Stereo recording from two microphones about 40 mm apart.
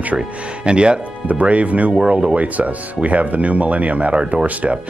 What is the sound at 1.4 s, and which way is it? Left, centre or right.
Speech, right.